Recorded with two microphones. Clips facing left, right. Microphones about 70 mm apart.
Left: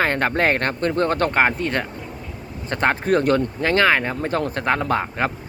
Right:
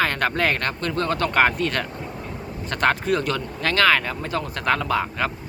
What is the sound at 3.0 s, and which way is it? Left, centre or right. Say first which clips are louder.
Speech: left 5 dB; left.